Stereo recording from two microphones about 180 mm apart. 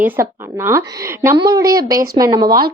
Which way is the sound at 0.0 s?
15° right (ahead or behind).